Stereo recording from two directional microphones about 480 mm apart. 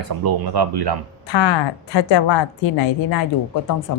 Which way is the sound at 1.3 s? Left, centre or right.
Left.